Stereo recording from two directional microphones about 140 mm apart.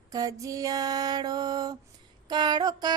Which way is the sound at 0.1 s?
25° right (ahead or behind).